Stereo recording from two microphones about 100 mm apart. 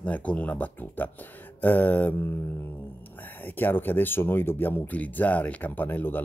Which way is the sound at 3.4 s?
20° left (ahead or behind).